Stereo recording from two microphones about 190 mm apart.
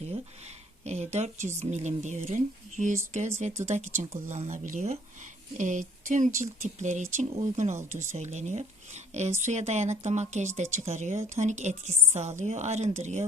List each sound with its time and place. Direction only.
0.9 s a woman's voice: 35° right (ahead or behind)